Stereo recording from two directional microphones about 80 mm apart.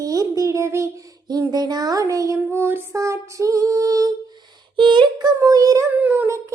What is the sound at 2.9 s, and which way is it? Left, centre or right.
Female singing, right.